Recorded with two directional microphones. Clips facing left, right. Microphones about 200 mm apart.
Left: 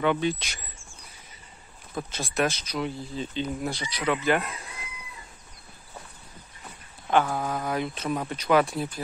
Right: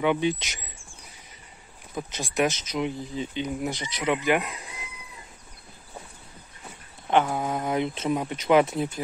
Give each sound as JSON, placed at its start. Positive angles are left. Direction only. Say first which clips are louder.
{"t": 0.0, "sound": "speech", "louder": "right 1 dB", "side_deg": -15}
{"t": 2.0, "sound": "speech", "louder": "right 1 dB", "side_deg": -15}
{"t": 7.1, "sound": "speech", "louder": "right 1 dB", "side_deg": -20}